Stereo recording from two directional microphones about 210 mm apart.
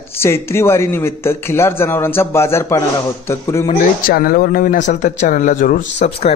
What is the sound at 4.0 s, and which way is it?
Speech, 45° left (ahead or behind).